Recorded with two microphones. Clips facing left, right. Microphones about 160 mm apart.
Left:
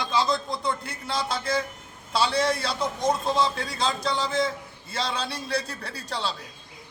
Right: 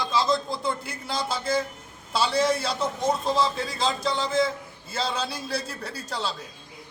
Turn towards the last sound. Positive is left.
turn(degrees=-5)  # may be behind; listen again after turning